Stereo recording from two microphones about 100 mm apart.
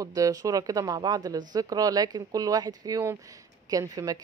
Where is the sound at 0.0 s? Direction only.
35° right (ahead or behind).